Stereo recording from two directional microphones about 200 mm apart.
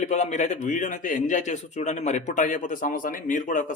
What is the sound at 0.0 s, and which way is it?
A man's voice, 35° left (ahead or behind).